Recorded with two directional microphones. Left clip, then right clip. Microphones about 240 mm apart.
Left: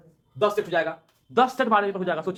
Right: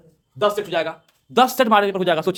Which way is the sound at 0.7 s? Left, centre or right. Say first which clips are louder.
Right 2 dB; right.